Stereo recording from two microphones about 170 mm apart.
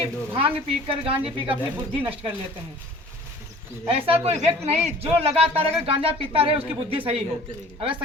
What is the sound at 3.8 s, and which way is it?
Speech, 35° right (ahead or behind).